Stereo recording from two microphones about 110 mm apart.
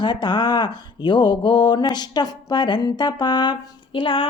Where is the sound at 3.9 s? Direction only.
50° left (ahead or behind).